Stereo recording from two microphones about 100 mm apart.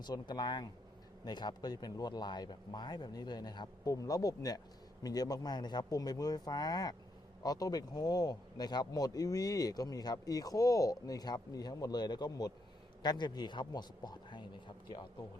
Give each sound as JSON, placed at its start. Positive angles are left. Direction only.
{"t": 0.0, "sound": "speech", "side_deg": 45}